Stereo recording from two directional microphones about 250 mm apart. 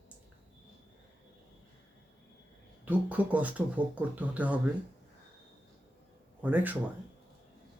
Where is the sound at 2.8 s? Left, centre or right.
Centre.